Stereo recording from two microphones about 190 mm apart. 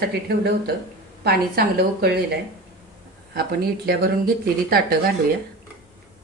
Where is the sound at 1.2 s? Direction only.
55° right (ahead or behind).